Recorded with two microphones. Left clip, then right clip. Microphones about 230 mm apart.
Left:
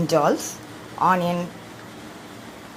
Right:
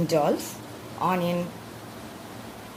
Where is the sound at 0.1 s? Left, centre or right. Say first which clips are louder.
Left 5 dB; centre.